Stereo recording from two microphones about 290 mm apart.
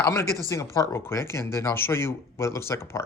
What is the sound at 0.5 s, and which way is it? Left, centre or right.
Speech, centre.